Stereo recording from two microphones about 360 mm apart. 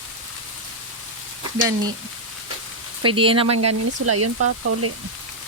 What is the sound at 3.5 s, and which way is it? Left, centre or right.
Speech, right.